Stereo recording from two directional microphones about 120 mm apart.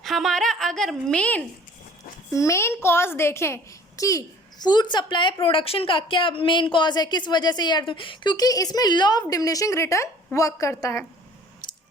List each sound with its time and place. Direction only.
0.0 s a woman's voice: centre (ahead or behind)
2.3 s a woman's voice: 25° left (ahead or behind)
11.6 s a sound: 35° left (ahead or behind)